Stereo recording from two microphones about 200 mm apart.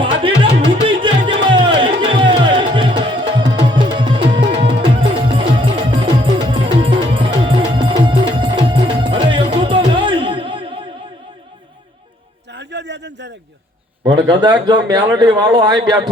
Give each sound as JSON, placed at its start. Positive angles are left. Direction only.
{"t": 0.0, "sound": "music", "side_deg": -25}
{"t": 12.5, "sound": "a sound", "side_deg": -60}
{"t": 14.3, "sound": "speech", "side_deg": -20}